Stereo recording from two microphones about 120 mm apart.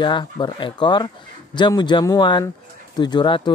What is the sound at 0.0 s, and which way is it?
Speech, 40° left (ahead or behind).